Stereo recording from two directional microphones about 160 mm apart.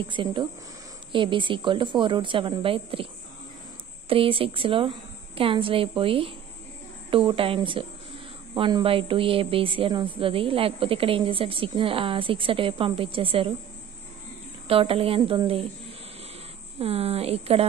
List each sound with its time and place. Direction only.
0.0 s a woman's voice: 30° right (ahead or behind)
4.1 s a woman's voice: 35° right (ahead or behind)
14.7 s a woman's voice: 35° right (ahead or behind)
16.7 s a woman's voice: 40° right (ahead or behind)